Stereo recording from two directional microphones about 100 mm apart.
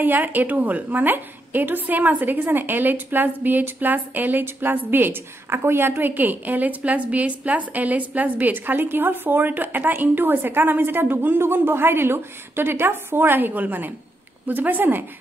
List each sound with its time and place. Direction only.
0.0 s a woman's voice: 20° right (ahead or behind)